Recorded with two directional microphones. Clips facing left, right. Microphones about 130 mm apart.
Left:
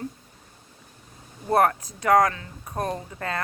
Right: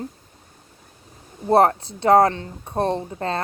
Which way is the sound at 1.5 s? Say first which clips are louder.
Right 5 dB; 25° right (ahead or behind).